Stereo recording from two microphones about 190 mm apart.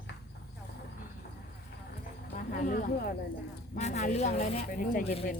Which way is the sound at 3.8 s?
35° left (ahead or behind).